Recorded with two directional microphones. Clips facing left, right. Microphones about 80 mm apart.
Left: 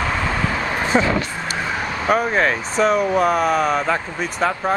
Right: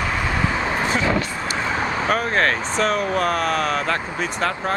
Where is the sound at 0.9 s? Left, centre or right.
Left.